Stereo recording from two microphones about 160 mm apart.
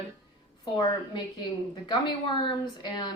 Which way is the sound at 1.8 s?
30° left (ahead or behind).